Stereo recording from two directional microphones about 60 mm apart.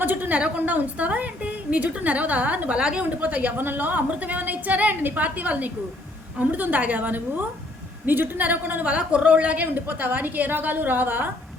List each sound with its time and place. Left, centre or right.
0.0 s a woman's voice: right
2.7 s a woman's voice: centre; by 11.3 s right